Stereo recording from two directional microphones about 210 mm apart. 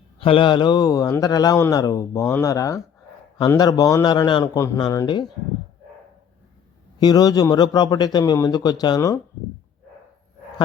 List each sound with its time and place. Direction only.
0.2 s a man's voice: 25° left (ahead or behind)
7.0 s a man's voice: 20° left (ahead or behind)